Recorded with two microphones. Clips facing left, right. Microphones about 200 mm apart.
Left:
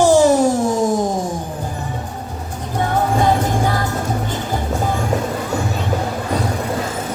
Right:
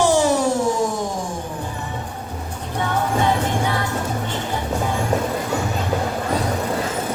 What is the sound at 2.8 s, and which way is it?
Music, 40° left (ahead or behind).